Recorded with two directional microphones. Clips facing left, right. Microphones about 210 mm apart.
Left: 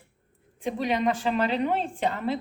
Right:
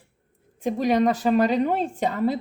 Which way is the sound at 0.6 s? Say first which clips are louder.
Right 6 dB; 45° right (ahead or behind).